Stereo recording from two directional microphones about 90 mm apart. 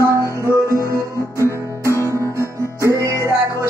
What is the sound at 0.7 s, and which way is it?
Music, 35° right (ahead or behind).